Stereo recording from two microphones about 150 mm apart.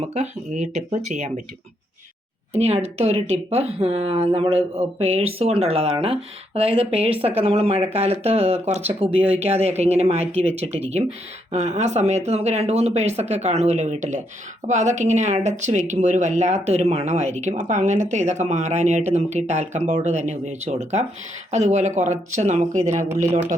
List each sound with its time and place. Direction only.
0.1 s speech: 50° right (ahead or behind)
2.5 s speech: 45° right (ahead or behind)